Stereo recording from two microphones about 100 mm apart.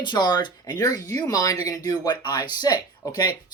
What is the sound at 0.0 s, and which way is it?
Speech, 50° left (ahead or behind).